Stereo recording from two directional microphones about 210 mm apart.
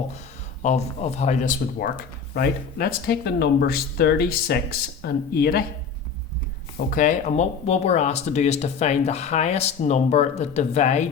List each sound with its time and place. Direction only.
0.6 s speech: 30° left (ahead or behind)
2.3 s speech: 45° left (ahead or behind)
6.9 s speech: 35° left (ahead or behind)